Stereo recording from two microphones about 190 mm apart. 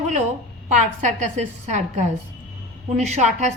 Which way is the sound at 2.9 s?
35° right (ahead or behind).